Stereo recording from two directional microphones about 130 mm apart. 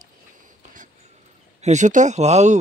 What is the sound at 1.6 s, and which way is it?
Speech, 70° right (ahead or behind).